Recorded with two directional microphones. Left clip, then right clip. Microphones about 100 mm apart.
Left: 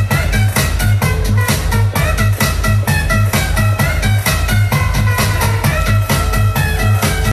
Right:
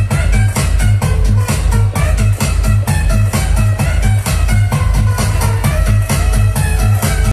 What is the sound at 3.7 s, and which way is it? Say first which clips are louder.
Music: left 3 dB; 20° right (ahead or behind).